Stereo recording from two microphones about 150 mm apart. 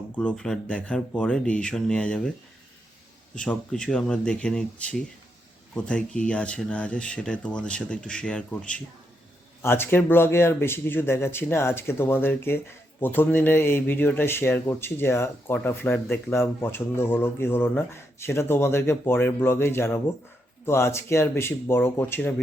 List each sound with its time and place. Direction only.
0.2 s speech: 5° left (ahead or behind)
3.3 s speech: 5° left (ahead or behind)